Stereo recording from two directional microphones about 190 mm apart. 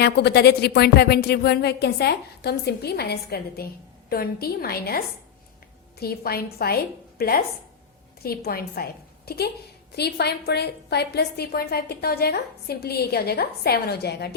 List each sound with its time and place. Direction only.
0.0 s a woman's voice: 60° left (ahead or behind)